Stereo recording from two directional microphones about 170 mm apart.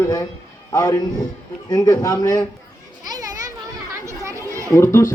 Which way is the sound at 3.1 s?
20° right (ahead or behind).